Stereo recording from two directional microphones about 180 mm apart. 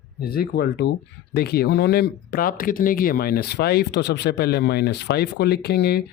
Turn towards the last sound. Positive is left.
turn(degrees=65)  # may be behind; listen again after turning